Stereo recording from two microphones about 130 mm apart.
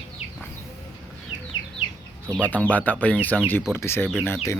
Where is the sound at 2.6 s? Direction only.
10° left (ahead or behind).